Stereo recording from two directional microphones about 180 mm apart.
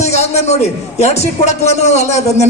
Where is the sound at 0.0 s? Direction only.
40° left (ahead or behind).